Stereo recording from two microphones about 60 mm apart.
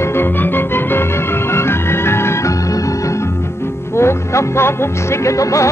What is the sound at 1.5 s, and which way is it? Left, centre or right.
Organ, left.